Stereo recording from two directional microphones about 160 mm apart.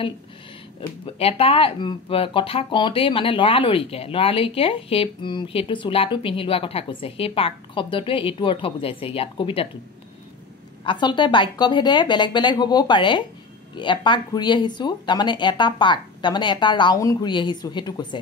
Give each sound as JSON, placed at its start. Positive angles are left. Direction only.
{"t": 0.7, "sound": "speech", "side_deg": 35}
{"t": 10.8, "sound": "speech", "side_deg": 30}